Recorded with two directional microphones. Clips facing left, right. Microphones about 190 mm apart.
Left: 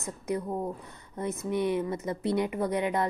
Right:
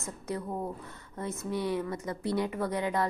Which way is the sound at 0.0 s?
15° left (ahead or behind).